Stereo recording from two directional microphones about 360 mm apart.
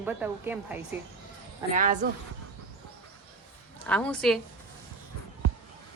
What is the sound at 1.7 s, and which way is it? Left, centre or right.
Speech, right.